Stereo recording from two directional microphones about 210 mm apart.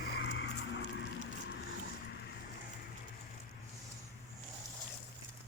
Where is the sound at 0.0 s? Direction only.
50° left (ahead or behind).